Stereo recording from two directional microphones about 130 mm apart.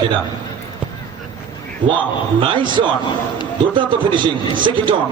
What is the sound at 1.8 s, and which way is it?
A man's voice, 40° right (ahead or behind).